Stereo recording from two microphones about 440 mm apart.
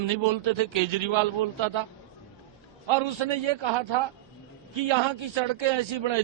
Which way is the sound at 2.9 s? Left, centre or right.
Right.